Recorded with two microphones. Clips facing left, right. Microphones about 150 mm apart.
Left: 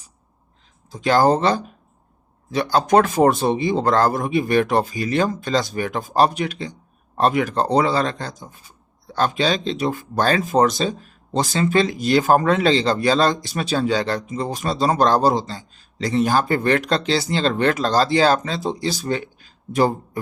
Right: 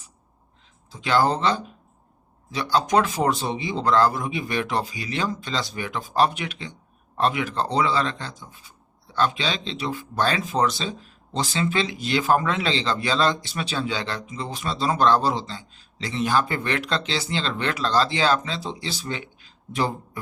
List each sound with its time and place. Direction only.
0.9 s speech: 40° left (ahead or behind)